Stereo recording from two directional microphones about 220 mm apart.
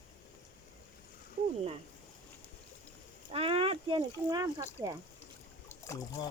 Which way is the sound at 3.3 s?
25° right (ahead or behind).